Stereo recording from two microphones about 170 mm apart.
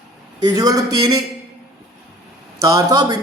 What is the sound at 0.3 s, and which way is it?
Speech, 20° right (ahead or behind).